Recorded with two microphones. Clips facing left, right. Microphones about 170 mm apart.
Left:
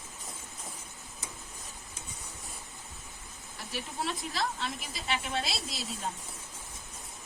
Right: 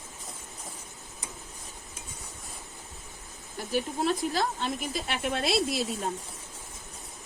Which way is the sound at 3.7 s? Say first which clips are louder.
Right 8 dB; 45° right (ahead or behind).